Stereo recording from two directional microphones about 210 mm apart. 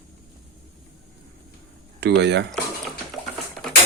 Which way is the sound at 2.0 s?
55° right (ahead or behind).